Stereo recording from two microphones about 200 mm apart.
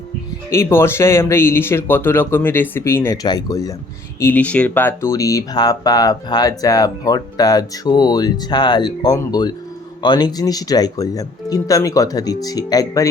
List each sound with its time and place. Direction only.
0.5 s speech: 15° left (ahead or behind)